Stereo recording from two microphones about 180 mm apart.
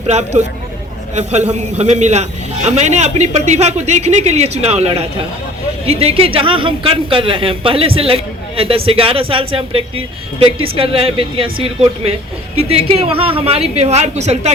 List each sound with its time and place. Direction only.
0.1 s a man's voice: 40° right (ahead or behind)